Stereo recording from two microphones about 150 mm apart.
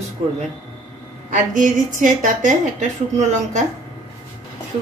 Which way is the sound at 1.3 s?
55° right (ahead or behind).